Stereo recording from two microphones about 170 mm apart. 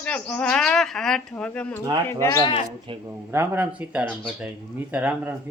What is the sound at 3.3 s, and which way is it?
Speech, 10° right (ahead or behind).